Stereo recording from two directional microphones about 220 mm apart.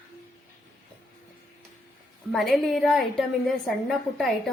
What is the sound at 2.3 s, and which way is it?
A woman's voice, centre (ahead or behind).